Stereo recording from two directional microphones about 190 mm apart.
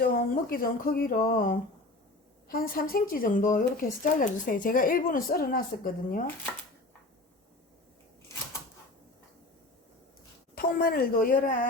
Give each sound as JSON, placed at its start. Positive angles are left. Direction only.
{"t": 0.0, "sound": "a woman's voice", "side_deg": 50}
{"t": 10.5, "sound": "a woman's voice", "side_deg": 50}